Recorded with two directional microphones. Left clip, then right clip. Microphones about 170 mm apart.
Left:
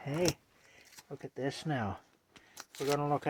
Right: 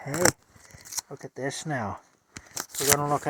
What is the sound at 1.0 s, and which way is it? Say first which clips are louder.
Speech: right 4 dB; 10° right (ahead or behind).